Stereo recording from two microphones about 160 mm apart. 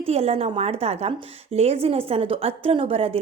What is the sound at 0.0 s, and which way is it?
A woman's voice, 40° right (ahead or behind).